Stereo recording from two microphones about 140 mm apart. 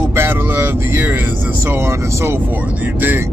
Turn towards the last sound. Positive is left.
turn(degrees=-15)  # may be behind; listen again after turning